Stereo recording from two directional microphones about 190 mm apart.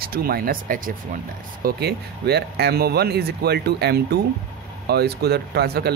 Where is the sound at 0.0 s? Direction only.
50° right (ahead or behind).